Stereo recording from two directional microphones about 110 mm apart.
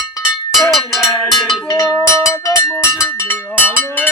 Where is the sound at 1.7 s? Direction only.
35° left (ahead or behind).